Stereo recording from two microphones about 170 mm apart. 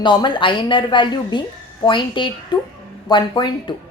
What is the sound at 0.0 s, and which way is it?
A woman's voice, 25° left (ahead or behind).